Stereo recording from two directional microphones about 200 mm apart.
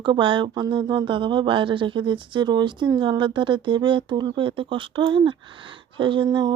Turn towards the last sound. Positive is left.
turn(degrees=-20)  # may be behind; listen again after turning